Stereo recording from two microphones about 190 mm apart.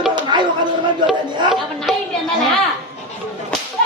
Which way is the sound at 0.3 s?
25° right (ahead or behind).